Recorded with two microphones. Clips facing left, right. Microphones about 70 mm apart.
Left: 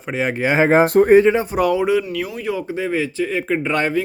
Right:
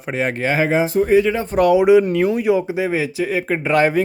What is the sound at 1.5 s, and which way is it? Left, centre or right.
Speech, centre.